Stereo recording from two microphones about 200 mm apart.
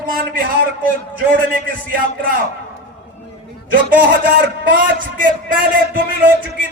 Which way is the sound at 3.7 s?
45° right (ahead or behind).